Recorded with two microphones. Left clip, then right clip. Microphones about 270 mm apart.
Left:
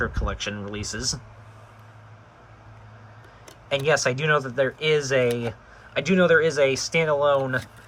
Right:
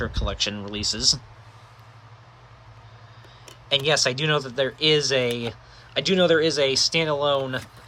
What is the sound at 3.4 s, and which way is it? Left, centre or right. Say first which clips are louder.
Speech: right 1 dB; centre.